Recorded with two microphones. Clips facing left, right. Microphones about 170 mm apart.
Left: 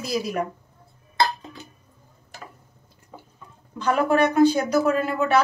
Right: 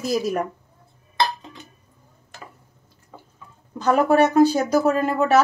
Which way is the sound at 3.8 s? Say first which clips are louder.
Right 3 dB; 40° right (ahead or behind).